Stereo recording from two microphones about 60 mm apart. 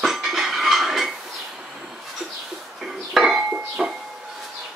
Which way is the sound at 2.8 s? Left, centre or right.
Centre.